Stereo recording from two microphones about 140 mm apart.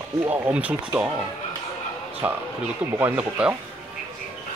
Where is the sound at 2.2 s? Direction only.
15° right (ahead or behind).